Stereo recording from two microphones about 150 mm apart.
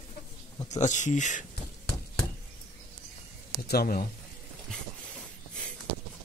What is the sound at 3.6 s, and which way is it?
Speech, 90° left.